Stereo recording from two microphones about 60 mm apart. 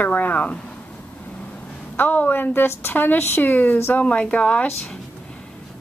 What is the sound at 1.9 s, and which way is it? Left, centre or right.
A woman's voice, left.